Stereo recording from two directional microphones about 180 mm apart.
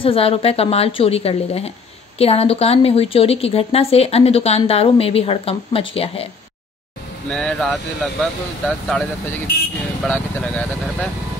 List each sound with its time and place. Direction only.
0.0 s a woman's voice: 30° left (ahead or behind)
7.2 s speech: 5° left (ahead or behind)
10.0 s speech: 5° left (ahead or behind)